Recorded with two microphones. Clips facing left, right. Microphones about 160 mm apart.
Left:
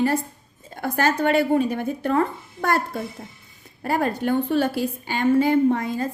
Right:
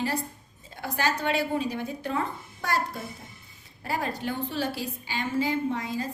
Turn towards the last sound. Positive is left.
turn(degrees=55)  # may be behind; listen again after turning